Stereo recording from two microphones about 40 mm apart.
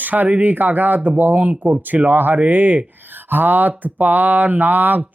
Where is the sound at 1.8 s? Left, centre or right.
Right.